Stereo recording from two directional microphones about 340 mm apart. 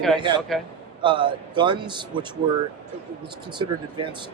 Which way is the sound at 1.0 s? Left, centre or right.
Centre.